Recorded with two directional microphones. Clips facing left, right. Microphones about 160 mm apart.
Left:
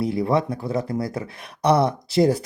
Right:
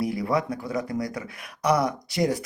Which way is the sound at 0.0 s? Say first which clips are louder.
Left 4 dB; 25° left (ahead or behind).